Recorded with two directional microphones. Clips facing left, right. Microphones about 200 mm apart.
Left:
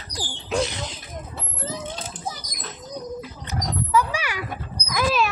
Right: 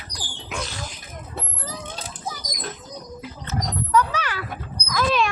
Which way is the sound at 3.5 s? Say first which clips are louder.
Right 1 dB; 10° left (ahead or behind).